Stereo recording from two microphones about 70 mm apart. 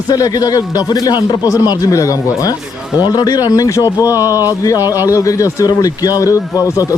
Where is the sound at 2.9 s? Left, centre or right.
Left.